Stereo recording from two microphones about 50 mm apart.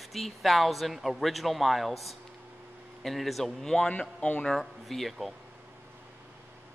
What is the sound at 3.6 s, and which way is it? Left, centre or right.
Speech, centre.